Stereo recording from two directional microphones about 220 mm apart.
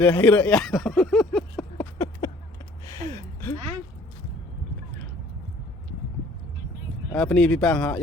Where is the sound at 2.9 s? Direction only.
15° left (ahead or behind).